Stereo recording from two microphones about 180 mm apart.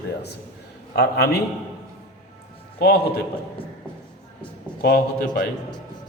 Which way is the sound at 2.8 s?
55° left (ahead or behind).